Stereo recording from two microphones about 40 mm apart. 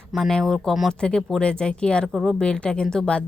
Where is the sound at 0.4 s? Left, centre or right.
Centre.